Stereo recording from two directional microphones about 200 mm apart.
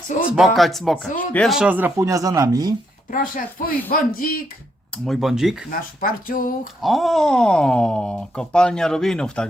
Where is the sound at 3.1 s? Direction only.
45° left (ahead or behind).